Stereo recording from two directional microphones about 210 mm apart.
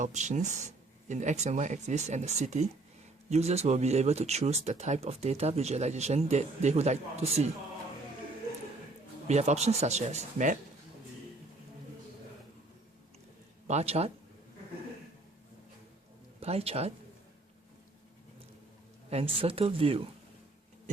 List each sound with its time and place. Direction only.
0.0 s speech: 35° right (ahead or behind)
9.2 s speech: 30° right (ahead or behind)
13.7 s a man's voice: 30° right (ahead or behind)
16.4 s speech: 30° right (ahead or behind)
19.1 s speech: 25° right (ahead or behind)